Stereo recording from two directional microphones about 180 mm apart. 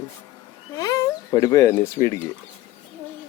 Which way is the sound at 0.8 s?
20° left (ahead or behind).